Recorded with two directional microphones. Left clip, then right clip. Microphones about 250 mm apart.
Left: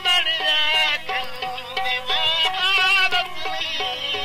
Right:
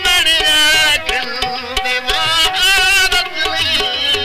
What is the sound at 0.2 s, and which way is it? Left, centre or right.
Music, right.